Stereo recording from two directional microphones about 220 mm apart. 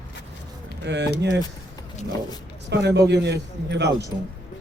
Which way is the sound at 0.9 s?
50° right (ahead or behind).